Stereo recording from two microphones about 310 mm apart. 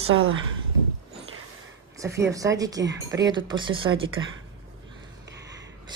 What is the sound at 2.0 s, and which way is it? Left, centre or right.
Speech, centre.